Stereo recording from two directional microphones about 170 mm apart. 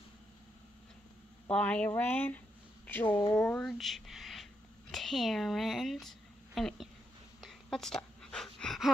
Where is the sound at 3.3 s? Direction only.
10° left (ahead or behind).